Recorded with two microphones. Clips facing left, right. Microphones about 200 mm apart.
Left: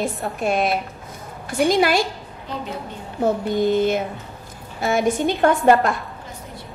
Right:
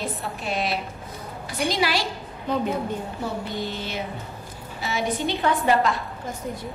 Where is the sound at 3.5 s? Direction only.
50° left (ahead or behind).